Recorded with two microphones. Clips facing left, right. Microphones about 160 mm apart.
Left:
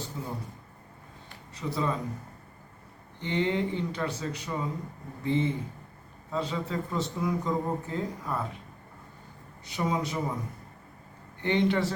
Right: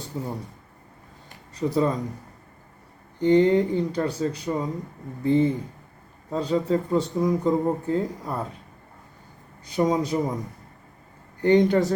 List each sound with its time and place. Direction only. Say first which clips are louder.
0.1 s speech: right 9 dB; 40° right (ahead or behind)
1.5 s speech: right 8 dB; 40° right (ahead or behind)
3.2 s speech: right 10 dB; 40° right (ahead or behind)
9.6 s speech: right 7 dB; 35° right (ahead or behind)
11.3 s speech: right 7 dB; 40° right (ahead or behind)